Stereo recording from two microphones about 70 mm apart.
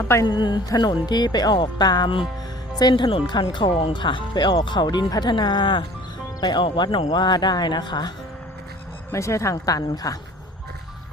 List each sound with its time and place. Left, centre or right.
0.3 s speech: left
9.1 s a woman's voice: left